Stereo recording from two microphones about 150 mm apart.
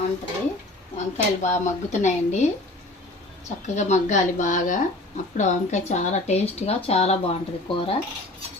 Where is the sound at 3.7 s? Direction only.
50° left (ahead or behind).